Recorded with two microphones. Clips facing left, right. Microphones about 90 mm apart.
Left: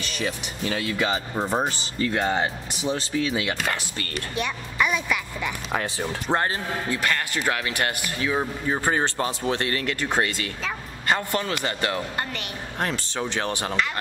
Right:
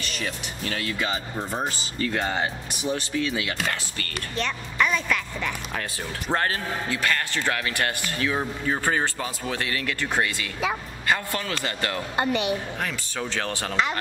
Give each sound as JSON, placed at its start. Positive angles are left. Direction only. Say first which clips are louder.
{"t": 0.7, "sound": "speech", "louder": "left 3 dB", "side_deg": 20}
{"t": 2.1, "sound": "speech", "louder": "left 3 dB", "side_deg": 20}
{"t": 4.4, "sound": "speech", "louder": "even", "side_deg": 10}
{"t": 6.3, "sound": "speech", "louder": "even", "side_deg": 20}
{"t": 9.5, "sound": "speech", "louder": "left 3 dB", "side_deg": 30}
{"t": 9.9, "sound": "speech", "louder": "left 1 dB", "side_deg": 20}
{"t": 12.2, "sound": "a woman's voice", "louder": "right 7 dB", "side_deg": -20}
{"t": 13.2, "sound": "speech", "louder": "left 1 dB", "side_deg": 20}